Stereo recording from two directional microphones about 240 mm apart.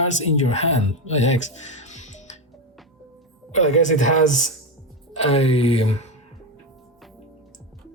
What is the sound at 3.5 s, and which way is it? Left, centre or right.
Speech, left.